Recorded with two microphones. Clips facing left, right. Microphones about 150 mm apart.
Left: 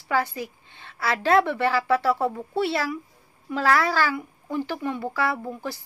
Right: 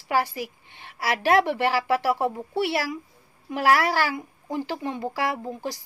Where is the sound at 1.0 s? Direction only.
15° right (ahead or behind).